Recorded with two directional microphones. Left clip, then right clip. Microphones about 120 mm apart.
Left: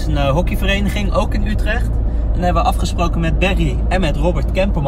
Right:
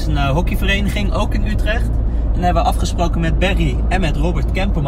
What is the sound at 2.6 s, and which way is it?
Speech, centre (ahead or behind).